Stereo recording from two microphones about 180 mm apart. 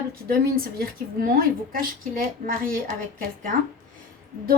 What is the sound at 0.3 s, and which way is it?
A woman's voice, 55° right (ahead or behind).